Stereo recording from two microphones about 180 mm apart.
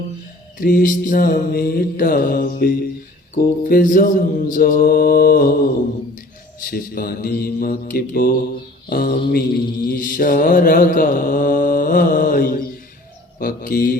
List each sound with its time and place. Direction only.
0.6 s mantra: 50° left (ahead or behind)